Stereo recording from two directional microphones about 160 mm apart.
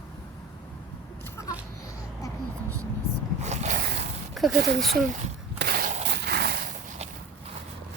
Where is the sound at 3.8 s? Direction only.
90° right.